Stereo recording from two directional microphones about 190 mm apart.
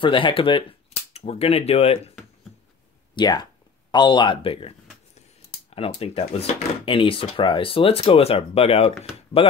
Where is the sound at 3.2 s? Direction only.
20° left (ahead or behind).